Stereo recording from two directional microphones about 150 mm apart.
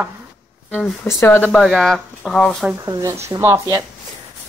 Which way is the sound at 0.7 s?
10° left (ahead or behind).